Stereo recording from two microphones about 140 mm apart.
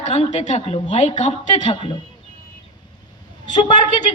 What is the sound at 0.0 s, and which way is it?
A man's voice, 55° left (ahead or behind).